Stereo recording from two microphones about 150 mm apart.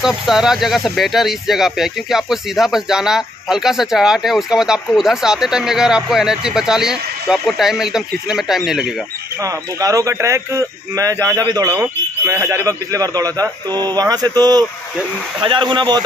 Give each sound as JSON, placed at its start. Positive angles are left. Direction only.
{"t": 0.0, "sound": "speech", "side_deg": -5}
{"t": 9.4, "sound": "speech", "side_deg": -25}